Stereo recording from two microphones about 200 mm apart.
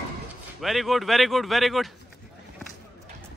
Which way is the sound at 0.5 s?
Centre (ahead or behind).